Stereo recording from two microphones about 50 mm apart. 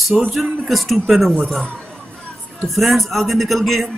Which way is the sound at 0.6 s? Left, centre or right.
Centre.